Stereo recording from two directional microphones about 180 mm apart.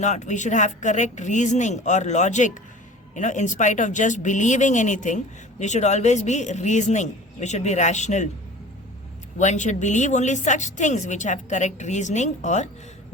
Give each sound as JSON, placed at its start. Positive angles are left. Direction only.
{"t": 0.0, "sound": "speech", "side_deg": 40}
{"t": 9.4, "sound": "speech", "side_deg": 40}